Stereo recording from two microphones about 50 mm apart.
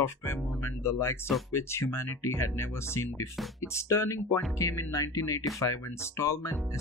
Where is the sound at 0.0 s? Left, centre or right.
Left.